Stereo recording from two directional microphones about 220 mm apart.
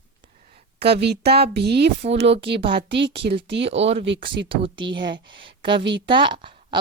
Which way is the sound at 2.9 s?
50° right (ahead or behind).